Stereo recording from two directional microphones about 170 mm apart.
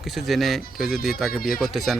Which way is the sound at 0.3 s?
Centre (ahead or behind).